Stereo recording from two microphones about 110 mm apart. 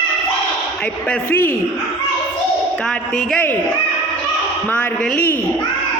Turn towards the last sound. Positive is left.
turn(degrees=15)  # may be behind; listen again after turning